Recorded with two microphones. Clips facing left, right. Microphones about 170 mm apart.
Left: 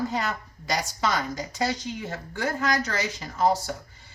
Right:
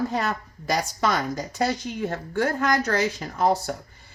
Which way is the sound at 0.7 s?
55° right (ahead or behind).